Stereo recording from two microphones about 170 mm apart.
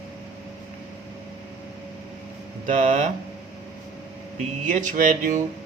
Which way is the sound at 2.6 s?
50° right (ahead or behind).